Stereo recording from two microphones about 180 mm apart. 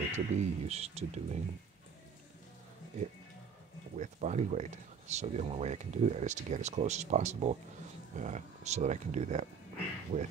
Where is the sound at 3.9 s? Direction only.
40° right (ahead or behind).